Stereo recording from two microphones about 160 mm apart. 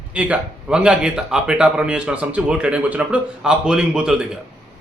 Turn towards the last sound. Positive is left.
turn(degrees=-5)  # may be behind; listen again after turning